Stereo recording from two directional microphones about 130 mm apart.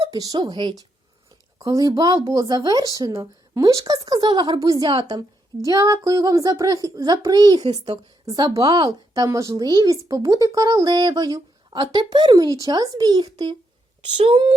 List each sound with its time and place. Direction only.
0.1 s a child's voice: 30° right (ahead or behind)
5.6 s a child's voice: 25° right (ahead or behind); by 14.5 s 45° right (ahead or behind)